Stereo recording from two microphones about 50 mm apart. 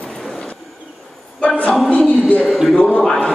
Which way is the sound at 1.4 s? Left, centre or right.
Left.